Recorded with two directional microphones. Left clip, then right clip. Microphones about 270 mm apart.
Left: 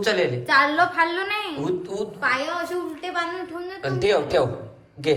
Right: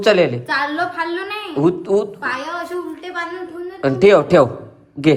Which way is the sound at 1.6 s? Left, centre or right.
Right.